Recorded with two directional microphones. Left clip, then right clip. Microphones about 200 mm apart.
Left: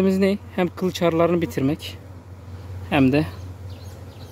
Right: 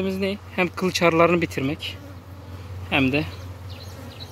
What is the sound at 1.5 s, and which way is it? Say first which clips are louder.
Speech: left 2 dB; 30° left (ahead or behind).